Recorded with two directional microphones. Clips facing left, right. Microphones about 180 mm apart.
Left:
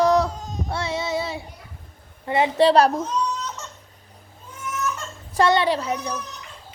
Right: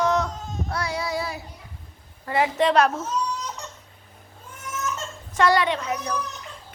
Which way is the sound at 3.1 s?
10° right (ahead or behind).